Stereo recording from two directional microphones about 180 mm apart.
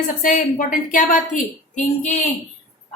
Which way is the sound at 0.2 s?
45° left (ahead or behind).